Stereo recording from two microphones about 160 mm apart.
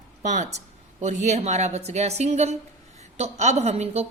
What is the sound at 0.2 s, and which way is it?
A woman's voice, 50° right (ahead or behind).